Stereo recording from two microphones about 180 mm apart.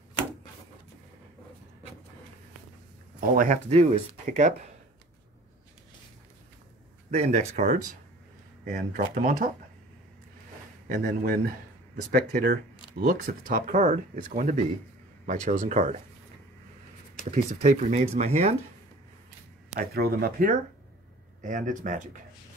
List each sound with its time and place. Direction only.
3.2 s speech: 50° right (ahead or behind)
7.1 s speech: 40° right (ahead or behind)
10.9 s speech: 50° right (ahead or behind)
17.3 s speech: 40° right (ahead or behind)
19.7 s speech: 60° right (ahead or behind); by 22.2 s 45° right (ahead or behind)